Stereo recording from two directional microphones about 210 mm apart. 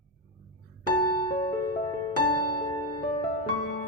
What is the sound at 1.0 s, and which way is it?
Music, 20° left (ahead or behind).